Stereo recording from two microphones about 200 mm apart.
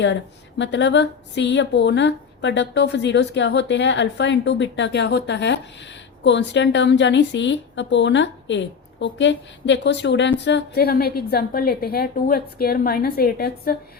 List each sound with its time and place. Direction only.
0.6 s speech: 65° left (ahead or behind)